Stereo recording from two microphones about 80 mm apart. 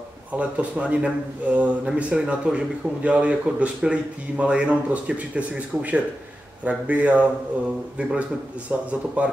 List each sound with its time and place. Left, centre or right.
0.3 s a man's voice: centre